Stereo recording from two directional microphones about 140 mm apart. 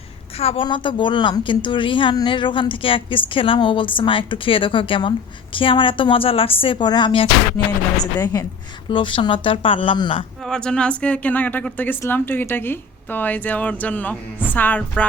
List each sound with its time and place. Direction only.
0.3 s a woman's voice: 45° left (ahead or behind)
8.2 s a woman's voice: 25° left (ahead or behind)
8.9 s a woman's voice: 35° left (ahead or behind)
10.4 s a woman's voice: 5° left (ahead or behind)